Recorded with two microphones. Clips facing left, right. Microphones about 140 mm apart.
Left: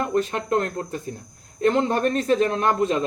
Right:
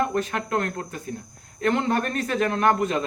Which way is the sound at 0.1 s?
30° left (ahead or behind).